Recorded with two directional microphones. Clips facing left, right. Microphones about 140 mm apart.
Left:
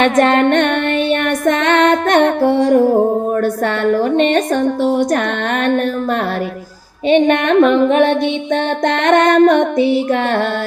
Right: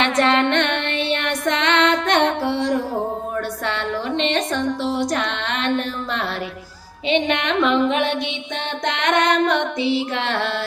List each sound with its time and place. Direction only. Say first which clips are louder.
0.0 s music: left 6 dB; 50° left (ahead or behind)
3.8 s music: left 11 dB; 50° left (ahead or behind)
7.1 s music: left 9 dB; 50° left (ahead or behind)